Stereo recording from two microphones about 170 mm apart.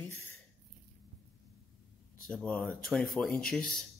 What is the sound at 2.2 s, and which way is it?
Speech, 5° left (ahead or behind).